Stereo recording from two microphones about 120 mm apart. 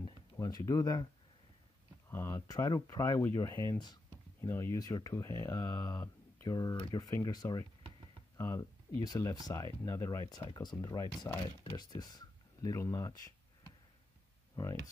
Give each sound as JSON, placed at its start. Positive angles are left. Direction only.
{"t": 0.4, "sound": "speech", "side_deg": 30}
{"t": 2.0, "sound": "speech", "side_deg": 20}
{"t": 4.4, "sound": "speech", "side_deg": 20}
{"t": 10.3, "sound": "speech", "side_deg": 35}